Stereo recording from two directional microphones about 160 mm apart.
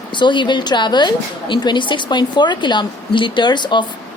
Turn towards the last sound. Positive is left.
turn(degrees=30)  # may be behind; listen again after turning